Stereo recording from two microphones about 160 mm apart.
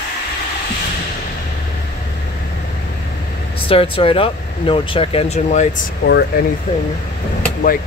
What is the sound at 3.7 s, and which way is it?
Speech, 35° left (ahead or behind).